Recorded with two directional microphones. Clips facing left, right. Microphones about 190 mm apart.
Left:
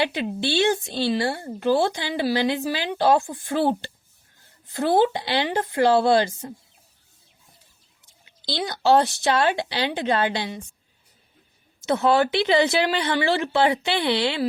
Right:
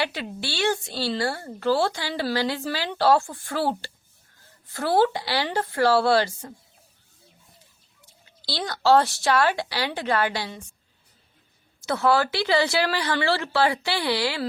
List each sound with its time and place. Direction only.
0.0 s speech: 20° left (ahead or behind)
8.2 s speech: 15° left (ahead or behind)
11.8 s speech: 20° left (ahead or behind)